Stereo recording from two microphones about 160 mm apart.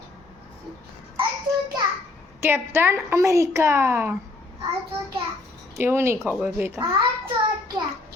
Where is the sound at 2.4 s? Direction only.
15° right (ahead or behind).